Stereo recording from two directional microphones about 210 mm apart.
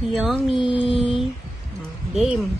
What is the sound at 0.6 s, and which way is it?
Speech, 20° left (ahead or behind).